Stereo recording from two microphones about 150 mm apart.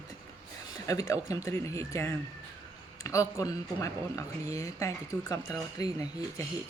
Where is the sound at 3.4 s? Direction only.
20° left (ahead or behind).